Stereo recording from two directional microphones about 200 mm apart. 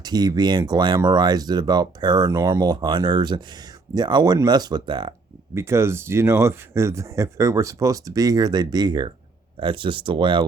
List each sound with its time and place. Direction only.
0.0 s speech: 20° right (ahead or behind)